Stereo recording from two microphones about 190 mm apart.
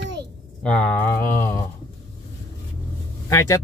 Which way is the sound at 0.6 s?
10° left (ahead or behind).